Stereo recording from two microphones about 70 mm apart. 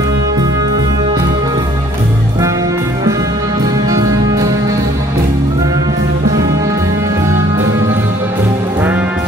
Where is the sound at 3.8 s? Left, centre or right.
Right.